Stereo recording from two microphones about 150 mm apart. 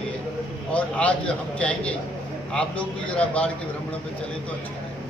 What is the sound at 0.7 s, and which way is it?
Speech, 10° left (ahead or behind).